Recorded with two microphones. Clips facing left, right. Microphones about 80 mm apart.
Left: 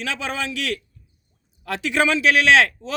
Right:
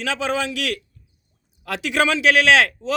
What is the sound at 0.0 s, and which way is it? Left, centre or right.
Speech, right.